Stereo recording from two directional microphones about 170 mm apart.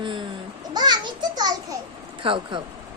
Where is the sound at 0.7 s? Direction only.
25° right (ahead or behind).